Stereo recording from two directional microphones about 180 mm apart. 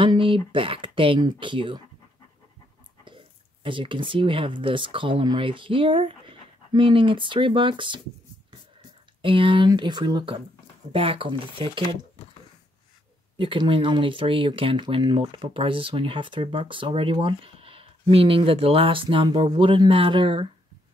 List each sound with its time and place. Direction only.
0.0 s speech: 30° right (ahead or behind)
3.6 s speech: 30° right (ahead or behind)
9.2 s speech: 30° right (ahead or behind)
13.4 s speech: 25° right (ahead or behind)